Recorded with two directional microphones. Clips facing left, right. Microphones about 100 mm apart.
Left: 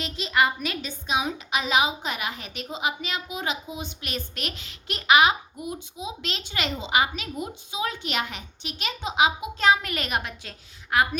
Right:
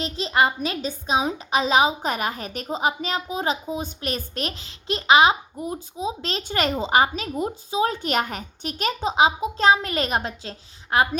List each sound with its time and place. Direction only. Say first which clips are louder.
0.0 s a woman's voice: right 2 dB; 35° right (ahead or behind)